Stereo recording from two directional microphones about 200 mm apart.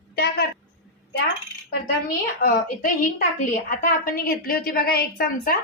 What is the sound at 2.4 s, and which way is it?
A woman's voice, 40° left (ahead or behind).